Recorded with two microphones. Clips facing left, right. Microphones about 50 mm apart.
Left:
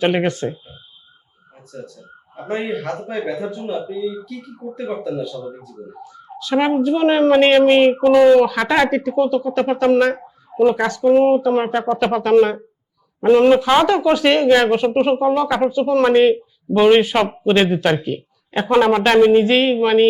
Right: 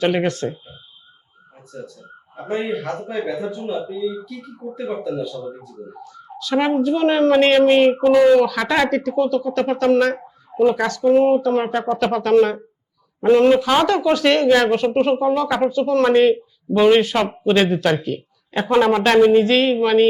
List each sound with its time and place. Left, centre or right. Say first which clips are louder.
0.0 s speech: left 1 dB; centre
1.7 s speech: even; centre
2.6 s speech: even; centre
3.7 s speech: even; centre
6.3 s speech: left 1 dB; centre